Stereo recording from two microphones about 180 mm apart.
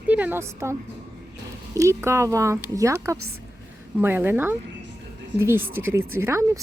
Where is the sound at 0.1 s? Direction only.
10° right (ahead or behind).